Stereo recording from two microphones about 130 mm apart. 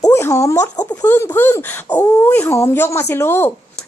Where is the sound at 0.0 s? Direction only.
20° left (ahead or behind).